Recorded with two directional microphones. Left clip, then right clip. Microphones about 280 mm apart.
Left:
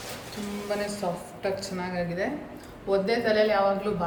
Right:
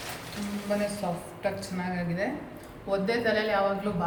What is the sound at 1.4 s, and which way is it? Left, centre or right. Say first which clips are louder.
A woman's voice: left 2 dB; centre.